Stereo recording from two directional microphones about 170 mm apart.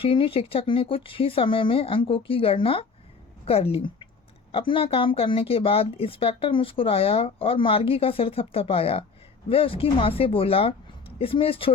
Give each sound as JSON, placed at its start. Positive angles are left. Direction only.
{"t": 0.0, "sound": "speech", "side_deg": 30}